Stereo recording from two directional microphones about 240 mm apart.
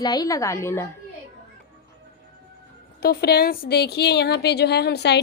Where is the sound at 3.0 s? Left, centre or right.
Left.